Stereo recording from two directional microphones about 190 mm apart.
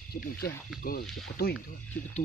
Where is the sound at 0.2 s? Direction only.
55° left (ahead or behind).